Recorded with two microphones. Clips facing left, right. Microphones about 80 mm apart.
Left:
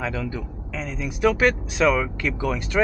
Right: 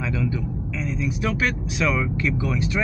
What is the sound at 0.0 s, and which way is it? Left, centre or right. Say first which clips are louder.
A man's voice: right 2 dB; left.